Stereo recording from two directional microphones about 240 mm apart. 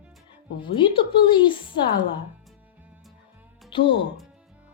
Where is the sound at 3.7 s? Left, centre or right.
Left.